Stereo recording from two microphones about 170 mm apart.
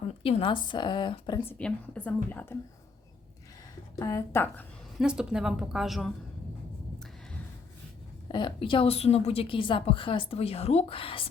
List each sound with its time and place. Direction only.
0.2 s a woman's voice: 35° left (ahead or behind)
1.5 s a woman's voice: 5° left (ahead or behind)
3.9 s a woman's voice: 20° left (ahead or behind)
4.9 s a woman's voice: 5° right (ahead or behind)
8.3 s a woman's voice: 30° left (ahead or behind)